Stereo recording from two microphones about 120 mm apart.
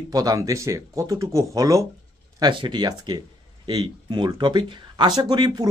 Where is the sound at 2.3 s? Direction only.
40° right (ahead or behind).